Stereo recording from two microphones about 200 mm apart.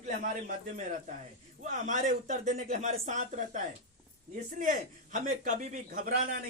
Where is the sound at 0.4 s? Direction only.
40° right (ahead or behind).